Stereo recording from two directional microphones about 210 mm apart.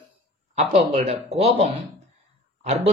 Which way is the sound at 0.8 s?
30° right (ahead or behind).